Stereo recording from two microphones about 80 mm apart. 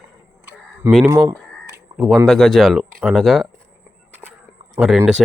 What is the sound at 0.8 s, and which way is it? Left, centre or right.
Speech, right.